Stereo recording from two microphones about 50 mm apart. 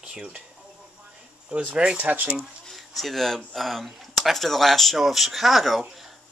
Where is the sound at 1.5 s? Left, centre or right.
Right.